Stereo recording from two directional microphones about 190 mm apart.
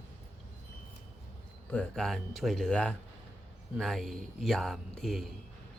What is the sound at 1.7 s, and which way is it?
A man's voice, 5° left (ahead or behind).